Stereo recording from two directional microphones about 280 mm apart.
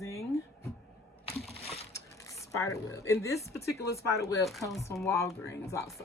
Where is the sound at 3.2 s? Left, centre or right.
Centre.